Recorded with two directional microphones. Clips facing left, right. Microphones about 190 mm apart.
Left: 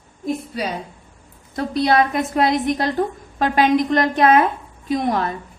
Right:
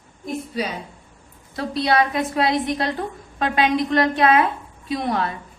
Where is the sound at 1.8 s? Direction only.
45° left (ahead or behind).